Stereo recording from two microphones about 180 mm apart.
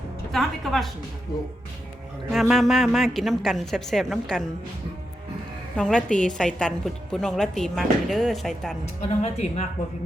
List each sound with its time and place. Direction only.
0.3 s a woman's voice: centre (ahead or behind)
2.3 s a woman's voice: centre (ahead or behind)
5.7 s a woman's voice: 5° left (ahead or behind)
9.0 s speech: 40° left (ahead or behind)